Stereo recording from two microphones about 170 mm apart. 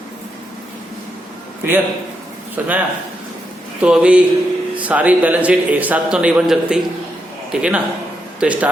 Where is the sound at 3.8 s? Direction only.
5° right (ahead or behind).